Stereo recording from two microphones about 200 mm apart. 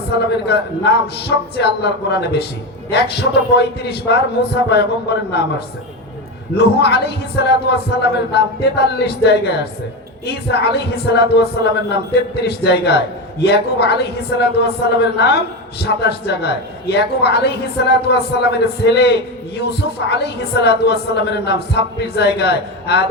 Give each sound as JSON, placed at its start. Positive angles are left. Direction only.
{"t": 0.3, "sound": "a man's voice", "side_deg": 55}
{"t": 6.6, "sound": "a man's voice", "side_deg": 55}